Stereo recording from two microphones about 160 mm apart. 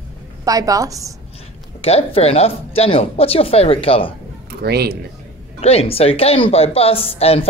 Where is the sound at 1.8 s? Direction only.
40° left (ahead or behind).